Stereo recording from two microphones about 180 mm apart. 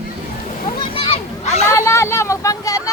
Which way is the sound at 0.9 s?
30° left (ahead or behind).